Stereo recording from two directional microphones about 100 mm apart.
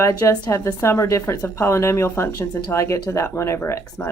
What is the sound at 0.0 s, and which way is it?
Speech, 30° left (ahead or behind).